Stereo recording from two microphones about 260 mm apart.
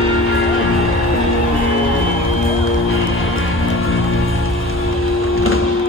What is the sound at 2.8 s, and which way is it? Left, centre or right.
Music, left.